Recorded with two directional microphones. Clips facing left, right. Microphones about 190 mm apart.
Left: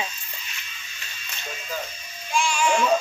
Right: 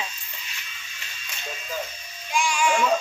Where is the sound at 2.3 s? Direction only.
15° right (ahead or behind).